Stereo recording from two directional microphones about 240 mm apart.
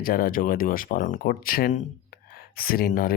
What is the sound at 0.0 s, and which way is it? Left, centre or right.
Speech, left.